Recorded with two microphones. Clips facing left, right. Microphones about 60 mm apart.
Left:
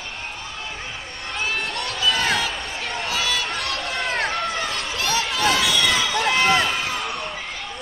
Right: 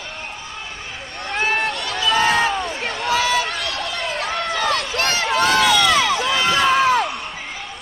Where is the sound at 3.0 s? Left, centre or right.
Right.